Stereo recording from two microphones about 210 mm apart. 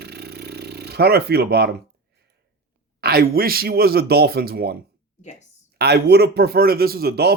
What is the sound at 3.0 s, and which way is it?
Speech, 45° right (ahead or behind).